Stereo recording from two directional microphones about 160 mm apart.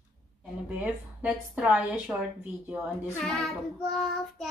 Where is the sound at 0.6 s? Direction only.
10° right (ahead or behind).